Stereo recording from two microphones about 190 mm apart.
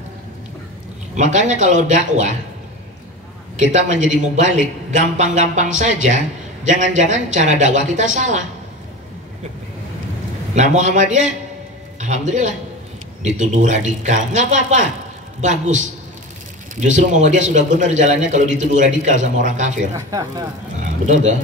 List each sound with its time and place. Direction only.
1.1 s a man's voice: 40° right (ahead or behind)
3.5 s a man's voice: 40° right (ahead or behind)
10.5 s a man's voice: 40° right (ahead or behind)
20.1 s speech: 20° right (ahead or behind)
20.8 s a man's voice: 40° right (ahead or behind)